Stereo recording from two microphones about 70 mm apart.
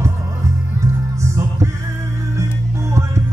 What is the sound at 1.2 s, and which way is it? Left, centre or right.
Music, right.